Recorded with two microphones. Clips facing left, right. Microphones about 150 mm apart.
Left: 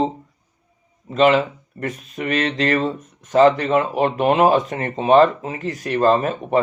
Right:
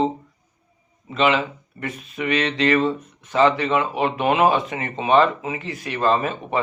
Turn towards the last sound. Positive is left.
turn(degrees=40)  # may be behind; listen again after turning